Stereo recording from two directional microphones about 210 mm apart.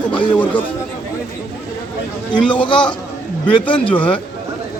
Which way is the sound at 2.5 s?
25° left (ahead or behind).